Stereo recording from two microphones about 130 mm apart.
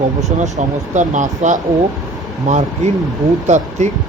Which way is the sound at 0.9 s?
75° right (ahead or behind).